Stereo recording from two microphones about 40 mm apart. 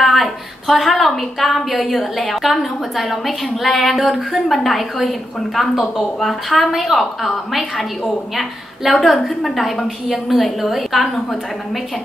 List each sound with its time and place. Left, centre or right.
0.0 s a woman's voice: centre